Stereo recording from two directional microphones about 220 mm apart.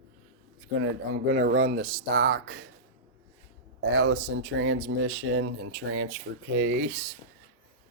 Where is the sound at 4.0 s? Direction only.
65° right (ahead or behind); by 6.1 s 80° right.